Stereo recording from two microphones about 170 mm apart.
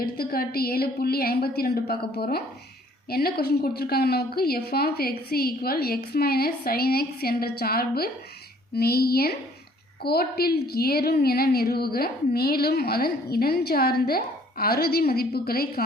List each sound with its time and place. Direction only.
0.0 s a woman's voice: 60° left (ahead or behind)